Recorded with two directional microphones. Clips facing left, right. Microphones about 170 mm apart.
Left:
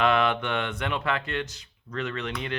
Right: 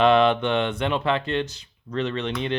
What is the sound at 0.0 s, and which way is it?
Speech, 30° right (ahead or behind).